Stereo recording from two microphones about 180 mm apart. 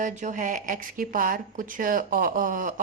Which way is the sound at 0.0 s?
45° right (ahead or behind).